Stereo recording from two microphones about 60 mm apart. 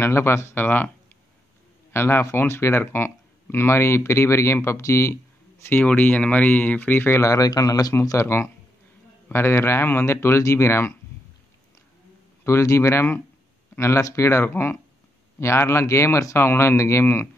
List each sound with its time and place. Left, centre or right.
0.0 s speech: left
0.6 s speech: left
1.9 s speech: left
2.8 s speech: left
5.6 s speech: left
7.2 s a man's voice: left
9.3 s speech: left
12.4 s speech: left
14.5 s speech: left
15.4 s speech: left
16.3 s speech: left